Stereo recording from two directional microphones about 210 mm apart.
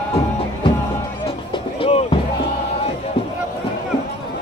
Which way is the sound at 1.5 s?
25° left (ahead or behind).